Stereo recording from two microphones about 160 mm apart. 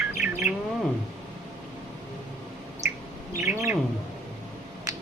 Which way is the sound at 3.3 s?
15° right (ahead or behind).